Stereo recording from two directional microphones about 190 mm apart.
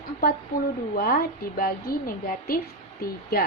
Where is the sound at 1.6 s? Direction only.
50° left (ahead or behind).